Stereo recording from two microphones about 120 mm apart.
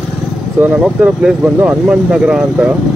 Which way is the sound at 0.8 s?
5° right (ahead or behind).